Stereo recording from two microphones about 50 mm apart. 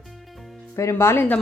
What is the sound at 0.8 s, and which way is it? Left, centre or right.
Speech, left.